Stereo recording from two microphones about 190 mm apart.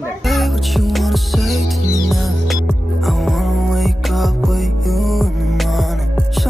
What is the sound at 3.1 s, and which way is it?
Music, centre (ahead or behind).